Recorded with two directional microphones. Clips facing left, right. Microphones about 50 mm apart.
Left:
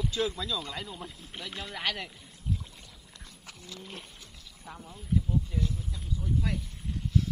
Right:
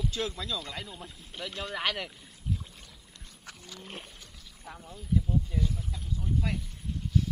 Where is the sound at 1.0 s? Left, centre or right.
Centre.